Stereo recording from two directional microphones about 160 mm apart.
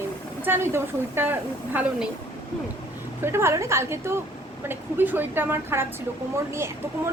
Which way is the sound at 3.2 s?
15° right (ahead or behind).